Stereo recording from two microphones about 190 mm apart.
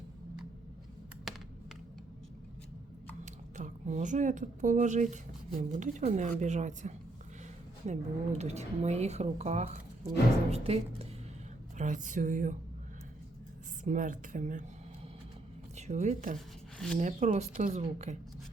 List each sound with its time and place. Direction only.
3.6 s speech: 40° right (ahead or behind)
13.8 s speech: 40° right (ahead or behind)
15.9 s speech: 40° right (ahead or behind)
16.7 s speech: centre (ahead or behind)
17.0 s speech: 40° right (ahead or behind)